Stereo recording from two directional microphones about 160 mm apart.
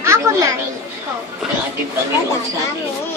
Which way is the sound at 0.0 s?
20° right (ahead or behind).